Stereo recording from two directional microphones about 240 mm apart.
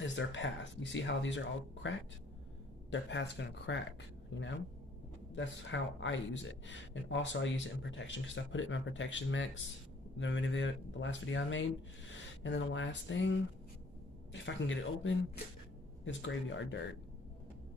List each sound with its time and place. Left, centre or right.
0.0 s speech: left
14.3 s speech: left